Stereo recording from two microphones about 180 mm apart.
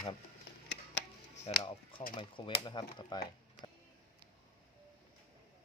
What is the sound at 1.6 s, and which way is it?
Speech, 30° left (ahead or behind).